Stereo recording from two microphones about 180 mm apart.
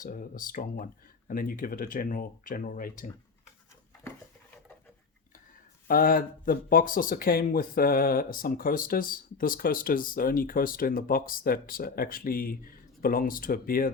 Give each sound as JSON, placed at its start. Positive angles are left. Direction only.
{"t": 0.0, "sound": "speech", "side_deg": 50}
{"t": 5.9, "sound": "speech", "side_deg": 50}